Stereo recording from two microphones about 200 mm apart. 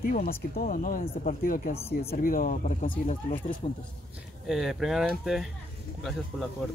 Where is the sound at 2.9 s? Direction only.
30° left (ahead or behind).